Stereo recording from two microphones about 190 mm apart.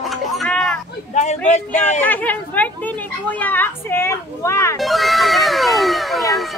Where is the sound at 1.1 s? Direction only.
40° left (ahead or behind).